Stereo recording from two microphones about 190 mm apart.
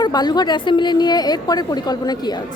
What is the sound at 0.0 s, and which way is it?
A woman's voice, 20° left (ahead or behind).